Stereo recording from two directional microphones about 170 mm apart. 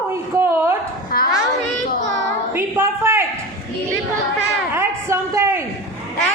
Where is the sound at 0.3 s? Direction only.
15° right (ahead or behind).